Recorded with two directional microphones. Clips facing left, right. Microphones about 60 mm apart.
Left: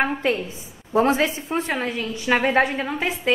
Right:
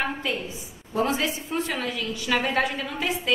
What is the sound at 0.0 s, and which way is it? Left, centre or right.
A woman's voice, left.